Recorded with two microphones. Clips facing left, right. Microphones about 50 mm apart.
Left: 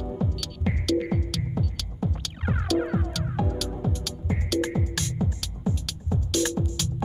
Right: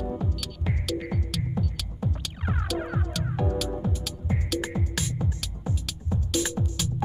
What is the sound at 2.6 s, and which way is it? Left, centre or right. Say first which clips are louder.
Music: left 7 dB; centre.